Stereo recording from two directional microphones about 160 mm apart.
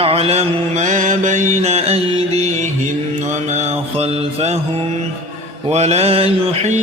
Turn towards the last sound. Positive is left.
turn(degrees=-45)  # may be behind; listen again after turning